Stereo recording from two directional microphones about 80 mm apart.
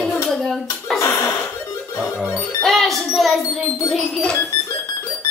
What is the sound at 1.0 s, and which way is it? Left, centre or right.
Chuckle, left.